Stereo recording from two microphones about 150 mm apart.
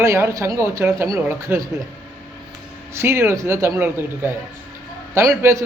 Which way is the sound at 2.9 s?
20° right (ahead or behind).